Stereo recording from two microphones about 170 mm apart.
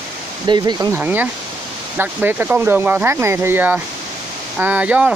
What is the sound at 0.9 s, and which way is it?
Speech, 10° right (ahead or behind).